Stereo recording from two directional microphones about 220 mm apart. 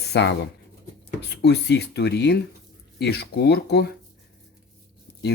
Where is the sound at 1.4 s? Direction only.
50° left (ahead or behind).